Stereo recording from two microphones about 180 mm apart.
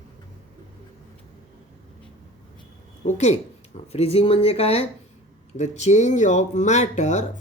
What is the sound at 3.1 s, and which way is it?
Speech, 40° left (ahead or behind).